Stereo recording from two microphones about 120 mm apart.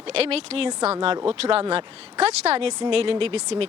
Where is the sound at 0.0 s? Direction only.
55° right (ahead or behind).